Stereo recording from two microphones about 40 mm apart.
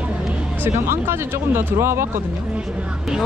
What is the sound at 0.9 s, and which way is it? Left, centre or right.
Speech, right.